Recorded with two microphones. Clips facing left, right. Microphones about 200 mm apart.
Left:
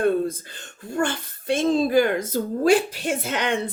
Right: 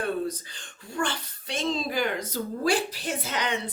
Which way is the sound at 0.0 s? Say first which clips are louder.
Left 7 dB; 50° left (ahead or behind).